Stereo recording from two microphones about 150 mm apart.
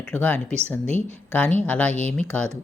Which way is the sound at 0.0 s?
10° left (ahead or behind).